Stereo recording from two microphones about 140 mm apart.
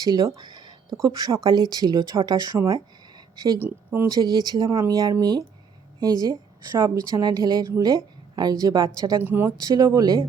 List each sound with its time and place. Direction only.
0.0 s a woman's voice: 25° right (ahead or behind)
2.7 s a sound: 30° right (ahead or behind)
3.6 s a woman's voice: 20° right (ahead or behind)
9.2 s speech: 15° right (ahead or behind)
9.6 s a woman's voice: 25° right (ahead or behind)